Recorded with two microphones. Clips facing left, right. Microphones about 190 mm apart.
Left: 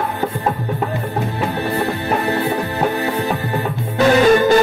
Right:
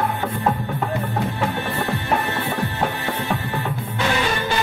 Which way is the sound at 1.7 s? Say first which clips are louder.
Left 3 dB; 35° left (ahead or behind).